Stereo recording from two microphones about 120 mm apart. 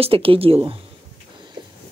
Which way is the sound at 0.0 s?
50° right (ahead or behind).